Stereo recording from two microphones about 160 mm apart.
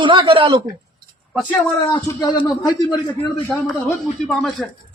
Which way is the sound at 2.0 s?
20° left (ahead or behind).